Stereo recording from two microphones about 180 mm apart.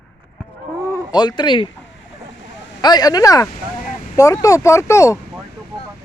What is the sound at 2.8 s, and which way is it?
Speech, 20° left (ahead or behind).